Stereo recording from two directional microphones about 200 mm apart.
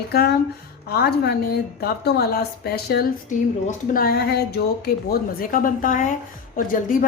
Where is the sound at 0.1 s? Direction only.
50° left (ahead or behind).